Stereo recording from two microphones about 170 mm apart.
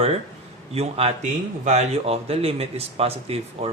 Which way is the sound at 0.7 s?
35° right (ahead or behind).